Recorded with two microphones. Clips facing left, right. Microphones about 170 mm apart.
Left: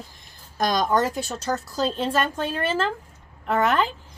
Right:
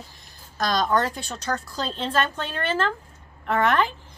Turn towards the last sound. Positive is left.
turn(degrees=5)  # may be behind; listen again after turning